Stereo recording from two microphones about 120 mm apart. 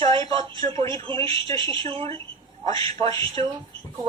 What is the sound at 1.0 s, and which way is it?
Speech, 50° right (ahead or behind).